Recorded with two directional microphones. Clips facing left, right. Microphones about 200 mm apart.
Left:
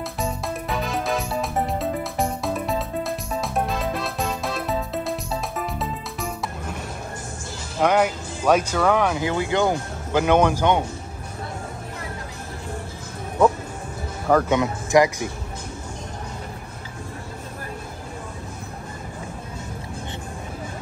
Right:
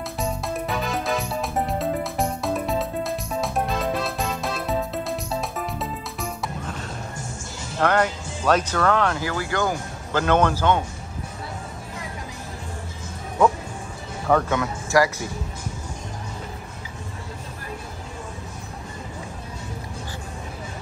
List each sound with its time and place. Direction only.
0.2 s music: centre (ahead or behind)
7.8 s speech: 10° left (ahead or behind)
14.5 s speech: 20° left (ahead or behind)